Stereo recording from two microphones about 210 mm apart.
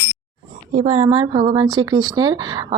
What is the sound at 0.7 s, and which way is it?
Speech, 30° right (ahead or behind).